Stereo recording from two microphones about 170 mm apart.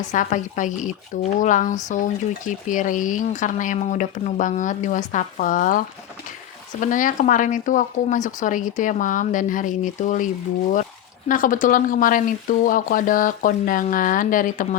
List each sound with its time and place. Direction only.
0.0 s speech: 45° left (ahead or behind)
11.3 s speech: 50° left (ahead or behind)